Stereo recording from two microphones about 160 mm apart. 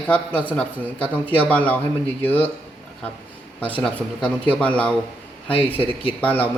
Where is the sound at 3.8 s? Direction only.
5° left (ahead or behind).